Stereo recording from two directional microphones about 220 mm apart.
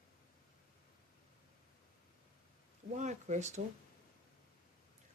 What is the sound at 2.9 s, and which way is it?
Speech, 30° right (ahead or behind).